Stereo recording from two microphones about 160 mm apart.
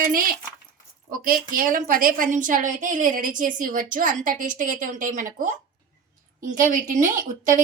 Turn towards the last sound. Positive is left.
turn(degrees=-55)  # may be behind; listen again after turning